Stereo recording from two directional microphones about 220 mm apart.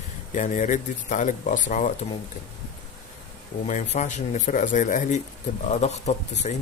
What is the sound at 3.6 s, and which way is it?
Speech, 30° left (ahead or behind).